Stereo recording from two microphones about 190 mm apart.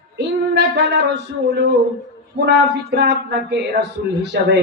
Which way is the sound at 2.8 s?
60° right (ahead or behind).